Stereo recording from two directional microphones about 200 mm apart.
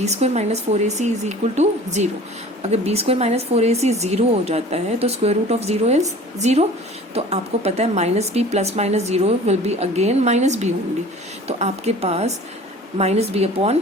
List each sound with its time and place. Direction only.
0.0 s speech: 35° right (ahead or behind)